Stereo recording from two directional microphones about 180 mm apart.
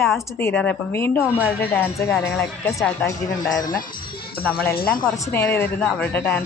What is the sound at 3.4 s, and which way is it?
Speech, 20° left (ahead or behind).